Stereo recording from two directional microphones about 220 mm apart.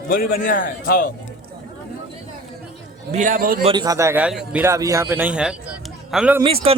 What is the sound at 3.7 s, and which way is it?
A man's voice, 15° right (ahead or behind).